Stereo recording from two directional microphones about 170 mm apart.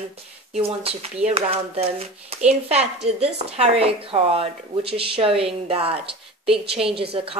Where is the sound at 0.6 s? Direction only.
35° right (ahead or behind).